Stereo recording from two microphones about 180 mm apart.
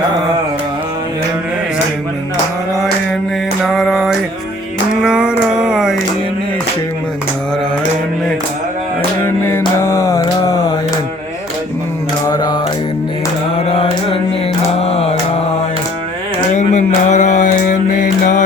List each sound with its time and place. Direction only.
2.7 s mantra: centre (ahead or behind)
3.6 s music: centre (ahead or behind)
4.9 s a sound: 5° right (ahead or behind)
9.2 s mantra: 15° left (ahead or behind)
12.3 s mantra: 20° left (ahead or behind)
13.7 s music: 30° left (ahead or behind)
14.8 s mantra: 35° left (ahead or behind)
16.6 s mantra: 40° left (ahead or behind)